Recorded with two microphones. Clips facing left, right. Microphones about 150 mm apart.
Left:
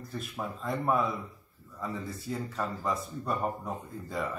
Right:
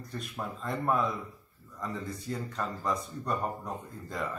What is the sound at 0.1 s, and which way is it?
A man's voice, centre (ahead or behind).